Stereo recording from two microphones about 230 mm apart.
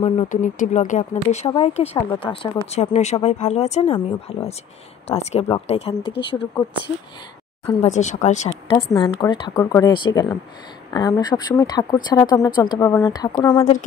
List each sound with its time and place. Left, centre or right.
0.0 s speech: left